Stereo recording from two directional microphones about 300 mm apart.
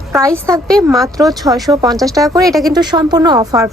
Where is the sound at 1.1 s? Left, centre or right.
Centre.